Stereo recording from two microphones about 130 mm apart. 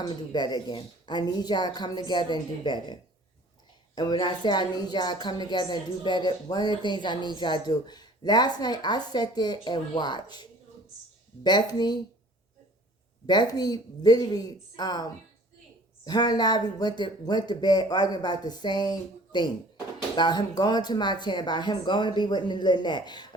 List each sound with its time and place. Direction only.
0.0 s speech: 30° left (ahead or behind)
13.2 s speech: 35° left (ahead or behind)